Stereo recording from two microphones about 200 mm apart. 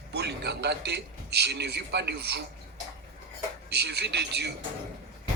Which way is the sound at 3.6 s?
55° right (ahead or behind).